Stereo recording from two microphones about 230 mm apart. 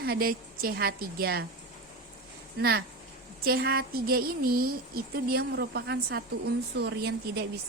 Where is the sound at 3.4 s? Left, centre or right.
Right.